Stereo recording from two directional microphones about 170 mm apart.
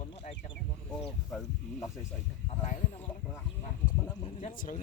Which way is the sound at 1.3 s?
Centre (ahead or behind).